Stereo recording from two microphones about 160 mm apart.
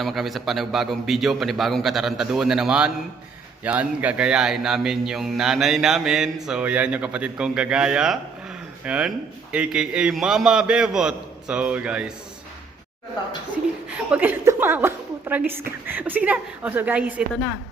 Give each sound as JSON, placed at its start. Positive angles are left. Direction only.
{"t": 0.0, "sound": "speech", "side_deg": 0}
{"t": 14.1, "sound": "a woman's voice", "side_deg": -10}